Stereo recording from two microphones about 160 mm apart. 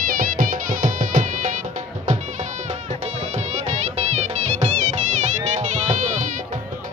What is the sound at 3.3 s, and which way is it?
Music, 45° right (ahead or behind).